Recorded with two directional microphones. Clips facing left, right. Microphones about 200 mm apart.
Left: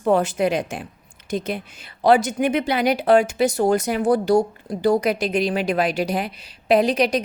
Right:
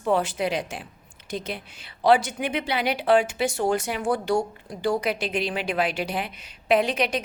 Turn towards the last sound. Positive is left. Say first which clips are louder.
# left 5 dB
turn(degrees=40)  # may be behind; listen again after turning